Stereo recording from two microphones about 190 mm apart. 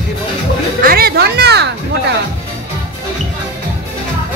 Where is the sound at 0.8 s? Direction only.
55° right (ahead or behind).